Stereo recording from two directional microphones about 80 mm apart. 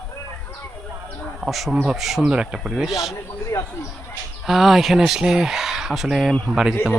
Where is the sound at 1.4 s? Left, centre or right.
Centre.